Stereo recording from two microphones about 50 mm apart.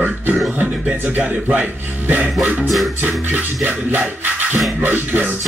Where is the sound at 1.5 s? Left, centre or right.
Right.